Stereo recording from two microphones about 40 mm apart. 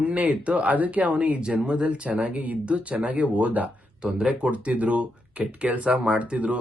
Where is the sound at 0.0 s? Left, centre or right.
Right.